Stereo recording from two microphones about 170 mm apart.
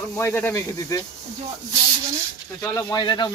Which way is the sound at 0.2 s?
15° left (ahead or behind).